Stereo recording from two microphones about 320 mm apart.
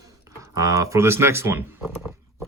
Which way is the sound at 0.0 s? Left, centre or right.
Centre.